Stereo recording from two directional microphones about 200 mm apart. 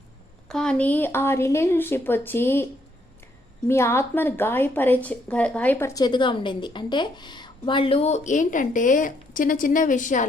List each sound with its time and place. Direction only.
0.4 s speech: 5° left (ahead or behind)
3.7 s speech: 15° left (ahead or behind); by 10.2 s 40° left (ahead or behind)